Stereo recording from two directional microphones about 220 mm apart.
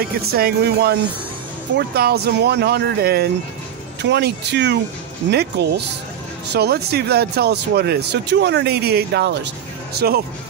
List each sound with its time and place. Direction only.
0.0 s speech: 45° right (ahead or behind)